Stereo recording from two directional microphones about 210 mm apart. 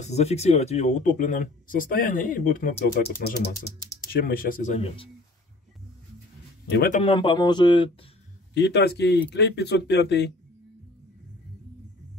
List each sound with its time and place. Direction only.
0.0 s speech: 30° left (ahead or behind)
6.7 s speech: 45° left (ahead or behind)
7.0 s speech: 25° left (ahead or behind)
8.5 s speech: 55° left (ahead or behind)